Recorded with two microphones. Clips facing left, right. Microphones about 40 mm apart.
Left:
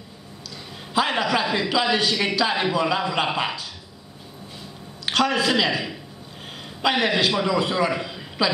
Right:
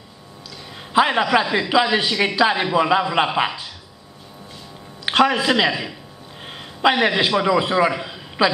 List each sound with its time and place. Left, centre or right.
0.9 s speech: right
5.0 s a man's voice: right
7.9 s a sound: centre